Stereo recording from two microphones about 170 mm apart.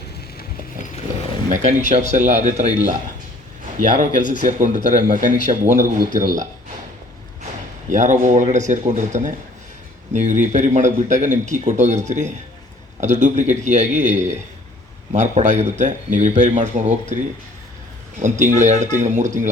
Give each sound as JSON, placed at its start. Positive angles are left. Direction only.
{"t": 1.5, "sound": "speech", "side_deg": -45}
{"t": 4.1, "sound": "speech", "side_deg": 50}
{"t": 4.4, "sound": "speech", "side_deg": -45}
{"t": 7.9, "sound": "speech", "side_deg": -45}
{"t": 18.2, "sound": "speech", "side_deg": -45}